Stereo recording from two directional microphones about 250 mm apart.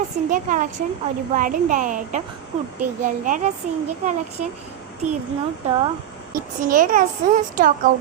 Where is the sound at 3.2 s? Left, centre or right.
Right.